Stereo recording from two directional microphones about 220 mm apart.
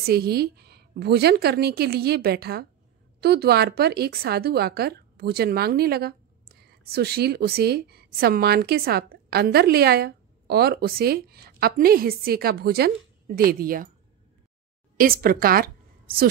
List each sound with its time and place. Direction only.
0.0 s speech: 45° right (ahead or behind)
15.0 s a woman's voice: 40° right (ahead or behind)